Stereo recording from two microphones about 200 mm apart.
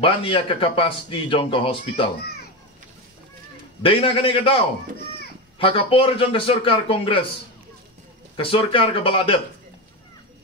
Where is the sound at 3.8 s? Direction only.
25° left (ahead or behind).